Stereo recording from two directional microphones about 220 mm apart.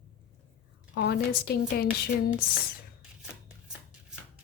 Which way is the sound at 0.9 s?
50° left (ahead or behind).